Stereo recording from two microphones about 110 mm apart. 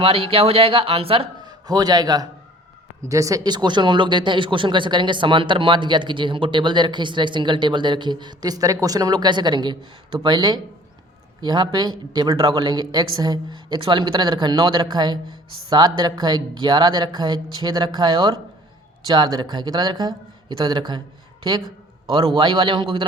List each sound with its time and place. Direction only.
0.0 s speech: 60° right (ahead or behind)
1.4 s a man's voice: 35° right (ahead or behind)
22.4 s speech: 45° right (ahead or behind)